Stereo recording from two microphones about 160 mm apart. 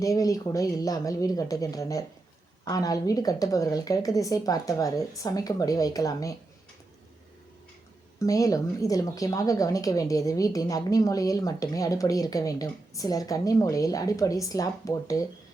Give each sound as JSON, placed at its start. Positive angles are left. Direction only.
{"t": 0.0, "sound": "speech", "side_deg": 20}
{"t": 8.2, "sound": "speech", "side_deg": 20}